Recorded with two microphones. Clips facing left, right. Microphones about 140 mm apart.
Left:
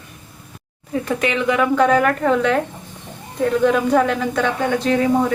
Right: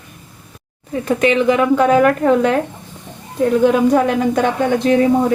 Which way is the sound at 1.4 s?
Centre (ahead or behind).